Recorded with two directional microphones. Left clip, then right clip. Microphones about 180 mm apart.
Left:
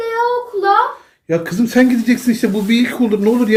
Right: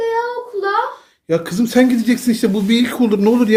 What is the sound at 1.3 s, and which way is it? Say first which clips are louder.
Speech: even; 25° right (ahead or behind).